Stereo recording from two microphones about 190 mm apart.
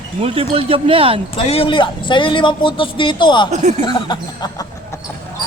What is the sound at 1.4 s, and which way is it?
A man's voice, 30° left (ahead or behind).